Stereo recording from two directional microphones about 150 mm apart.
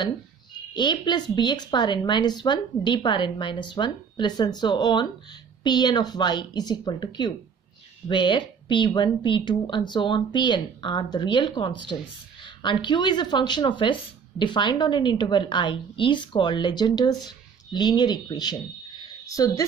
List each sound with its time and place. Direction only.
0.7 s a woman's voice: 30° left (ahead or behind)